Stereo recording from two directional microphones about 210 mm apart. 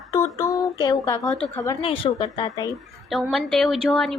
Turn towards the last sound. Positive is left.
turn(degrees=0)  # may be behind; listen again after turning